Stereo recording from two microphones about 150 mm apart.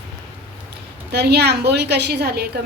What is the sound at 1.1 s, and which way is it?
A woman's voice, 90° right.